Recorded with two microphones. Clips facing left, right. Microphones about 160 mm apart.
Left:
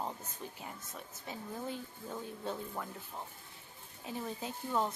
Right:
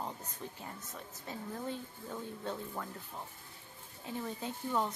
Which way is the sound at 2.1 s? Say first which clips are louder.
Even; 5° left (ahead or behind).